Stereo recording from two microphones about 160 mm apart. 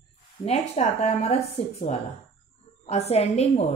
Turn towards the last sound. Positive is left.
turn(degrees=40)  # may be behind; listen again after turning